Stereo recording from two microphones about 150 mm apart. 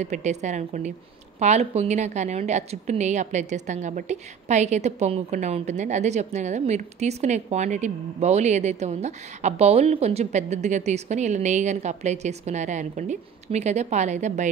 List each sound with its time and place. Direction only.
0.0 s a woman's voice: 50° right (ahead or behind)